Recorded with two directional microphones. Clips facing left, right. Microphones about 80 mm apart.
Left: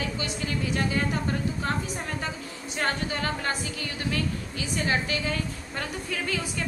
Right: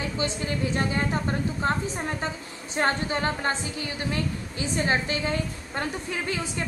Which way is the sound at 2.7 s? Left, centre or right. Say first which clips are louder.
Right 4 dB; right.